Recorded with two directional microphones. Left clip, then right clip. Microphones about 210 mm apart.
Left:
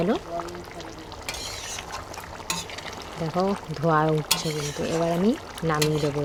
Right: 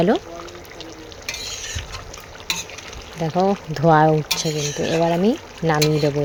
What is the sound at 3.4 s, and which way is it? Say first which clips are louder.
Speech: right 7 dB; 20° right (ahead or behind).